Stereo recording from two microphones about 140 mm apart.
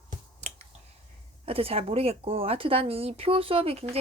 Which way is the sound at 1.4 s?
45° right (ahead or behind).